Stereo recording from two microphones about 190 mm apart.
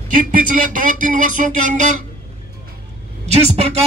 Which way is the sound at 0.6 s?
45° right (ahead or behind).